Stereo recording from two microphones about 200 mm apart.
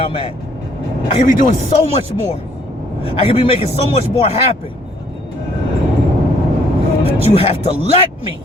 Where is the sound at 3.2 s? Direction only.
30° left (ahead or behind).